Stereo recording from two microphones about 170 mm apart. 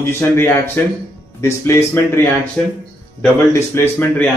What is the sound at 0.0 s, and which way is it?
Speech, 15° left (ahead or behind).